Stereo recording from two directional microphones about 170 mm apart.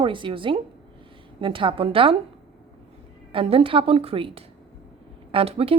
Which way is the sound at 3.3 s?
35° right (ahead or behind).